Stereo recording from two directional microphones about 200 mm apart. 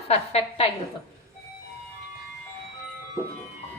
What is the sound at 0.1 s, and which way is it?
Speech, 30° left (ahead or behind).